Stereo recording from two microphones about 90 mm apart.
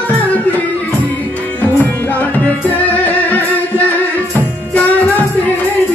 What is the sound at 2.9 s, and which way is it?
Music, 20° left (ahead or behind).